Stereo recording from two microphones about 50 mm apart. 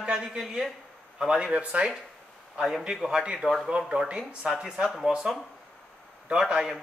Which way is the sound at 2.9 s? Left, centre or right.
Centre.